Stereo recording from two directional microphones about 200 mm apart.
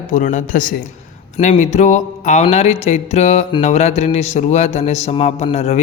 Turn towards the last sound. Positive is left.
turn(degrees=30)  # may be behind; listen again after turning